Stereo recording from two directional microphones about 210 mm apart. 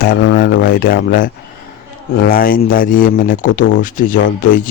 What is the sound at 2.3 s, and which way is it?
Speech, 45° left (ahead or behind).